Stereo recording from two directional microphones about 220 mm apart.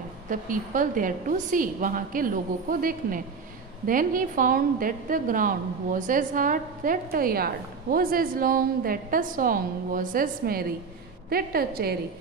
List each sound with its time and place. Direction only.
0.3 s a woman's voice: 35° right (ahead or behind)